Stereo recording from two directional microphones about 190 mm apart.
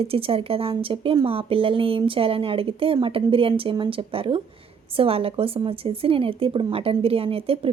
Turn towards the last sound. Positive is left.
turn(degrees=-30)  # may be behind; listen again after turning